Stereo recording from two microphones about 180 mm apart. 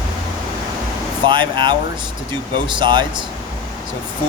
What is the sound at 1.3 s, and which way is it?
Speech, 25° right (ahead or behind).